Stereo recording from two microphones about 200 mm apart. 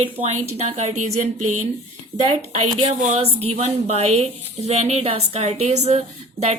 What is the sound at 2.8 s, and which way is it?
A woman's voice, 30° right (ahead or behind).